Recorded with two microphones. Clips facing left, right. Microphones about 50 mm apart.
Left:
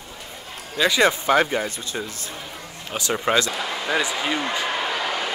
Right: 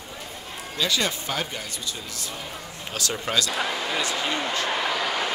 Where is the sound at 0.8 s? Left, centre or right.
Left.